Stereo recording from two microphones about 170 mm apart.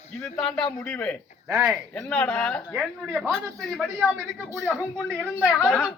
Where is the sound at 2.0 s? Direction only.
10° left (ahead or behind).